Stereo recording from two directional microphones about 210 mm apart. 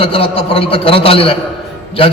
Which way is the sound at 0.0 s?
25° left (ahead or behind).